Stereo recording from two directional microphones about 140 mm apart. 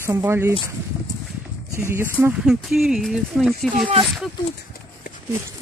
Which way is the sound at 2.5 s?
Centre (ahead or behind).